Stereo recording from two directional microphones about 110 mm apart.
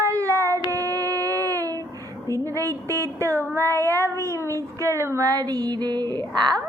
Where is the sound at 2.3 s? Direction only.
30° right (ahead or behind).